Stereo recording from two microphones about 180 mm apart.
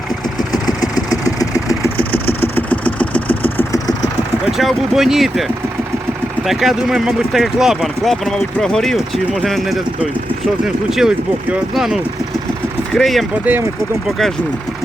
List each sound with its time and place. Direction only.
0.3 s vehicle: 20° left (ahead or behind)
2.6 s engine: 10° left (ahead or behind)
3.6 s vehicle: 20° left (ahead or behind)
4.5 s speech: centre (ahead or behind)